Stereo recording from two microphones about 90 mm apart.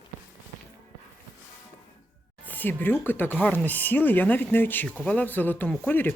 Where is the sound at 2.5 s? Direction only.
20° left (ahead or behind).